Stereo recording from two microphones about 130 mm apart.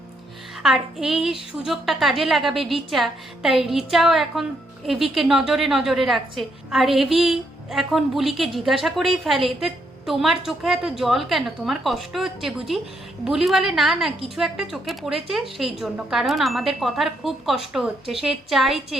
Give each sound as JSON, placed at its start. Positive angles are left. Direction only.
{"t": 0.6, "sound": "a woman's voice", "side_deg": -5}